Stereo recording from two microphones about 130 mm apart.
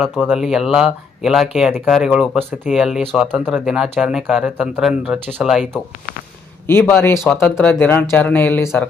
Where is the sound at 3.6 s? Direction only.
5° right (ahead or behind).